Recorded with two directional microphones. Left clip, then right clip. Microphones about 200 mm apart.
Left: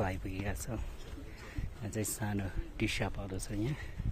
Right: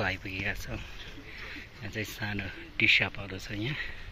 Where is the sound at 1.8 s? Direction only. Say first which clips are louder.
Right 3 dB; 30° left (ahead or behind); by 3.9 s 15° left (ahead or behind).